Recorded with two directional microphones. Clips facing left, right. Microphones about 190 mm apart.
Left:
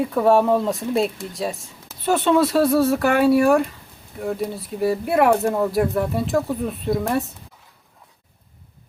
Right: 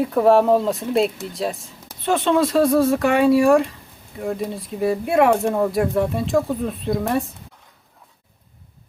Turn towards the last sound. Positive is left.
turn(degrees=0)  # may be behind; listen again after turning